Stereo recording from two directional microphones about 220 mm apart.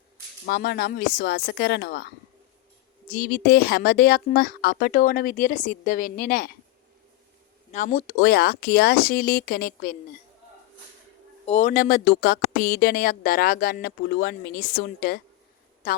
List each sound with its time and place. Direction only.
0.4 s speech: 45° left (ahead or behind)
7.7 s speech: 35° left (ahead or behind)
8.2 s speech: 45° left (ahead or behind)
11.4 s speech: 30° left (ahead or behind)